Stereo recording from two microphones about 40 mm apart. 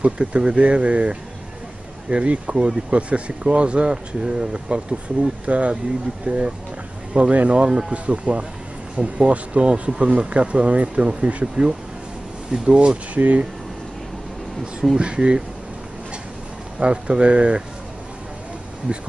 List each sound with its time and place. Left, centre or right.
0.0 s speech: right
12.6 s speech: right
15.0 s speech: right
16.8 s speech: right